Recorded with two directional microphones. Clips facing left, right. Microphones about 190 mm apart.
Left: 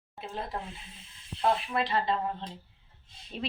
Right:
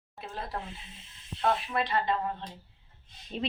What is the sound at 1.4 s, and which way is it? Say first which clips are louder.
Speech: left 1 dB; 25° left (ahead or behind).